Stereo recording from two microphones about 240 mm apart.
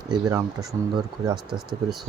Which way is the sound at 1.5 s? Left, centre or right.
Centre.